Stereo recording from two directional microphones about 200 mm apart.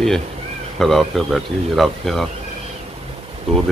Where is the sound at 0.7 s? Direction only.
Centre (ahead or behind).